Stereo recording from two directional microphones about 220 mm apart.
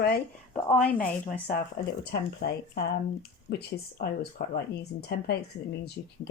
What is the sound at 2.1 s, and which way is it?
Speech, 45° left (ahead or behind).